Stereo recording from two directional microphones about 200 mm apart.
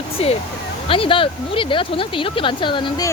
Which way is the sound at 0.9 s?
25° left (ahead or behind).